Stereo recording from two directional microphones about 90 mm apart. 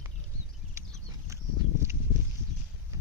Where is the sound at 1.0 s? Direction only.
35° right (ahead or behind).